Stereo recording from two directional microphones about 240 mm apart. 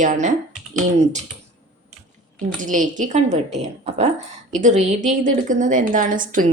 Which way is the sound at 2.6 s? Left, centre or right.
Right.